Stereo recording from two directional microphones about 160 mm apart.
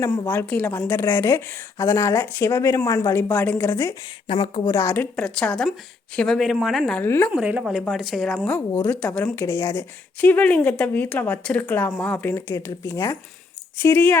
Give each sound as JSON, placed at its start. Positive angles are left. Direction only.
{"t": 0.3, "sound": "a woman's voice", "side_deg": 10}
{"t": 4.3, "sound": "a woman's voice", "side_deg": 35}
{"t": 4.6, "sound": "a woman's voice", "side_deg": 15}
{"t": 5.1, "sound": "speech", "side_deg": 5}
{"t": 7.3, "sound": "speech", "side_deg": -10}
{"t": 8.5, "sound": "a woman's voice", "side_deg": 10}